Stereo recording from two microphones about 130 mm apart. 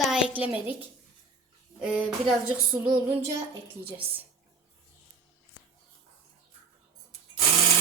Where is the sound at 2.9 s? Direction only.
30° right (ahead or behind).